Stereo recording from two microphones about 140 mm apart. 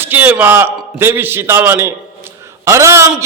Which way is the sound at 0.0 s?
15° right (ahead or behind).